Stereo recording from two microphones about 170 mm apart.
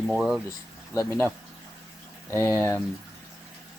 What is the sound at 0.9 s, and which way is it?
Speech, 15° left (ahead or behind).